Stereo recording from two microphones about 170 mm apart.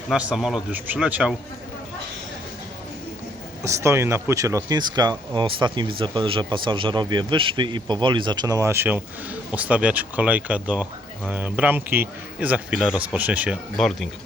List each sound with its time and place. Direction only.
0.1 s speech: 5° right (ahead or behind)
3.6 s speech: 15° right (ahead or behind); by 14.1 s centre (ahead or behind)